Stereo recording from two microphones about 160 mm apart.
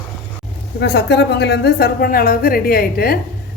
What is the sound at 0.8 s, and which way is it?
A woman's voice, 90° left.